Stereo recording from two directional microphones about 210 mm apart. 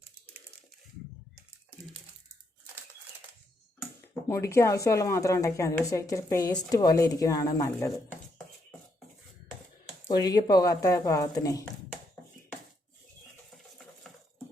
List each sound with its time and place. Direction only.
4.3 s a woman's voice: 15° left (ahead or behind)
10.1 s a woman's voice: 20° left (ahead or behind)